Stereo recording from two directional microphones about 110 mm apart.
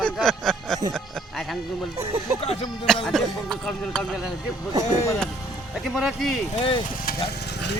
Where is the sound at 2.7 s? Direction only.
5° left (ahead or behind).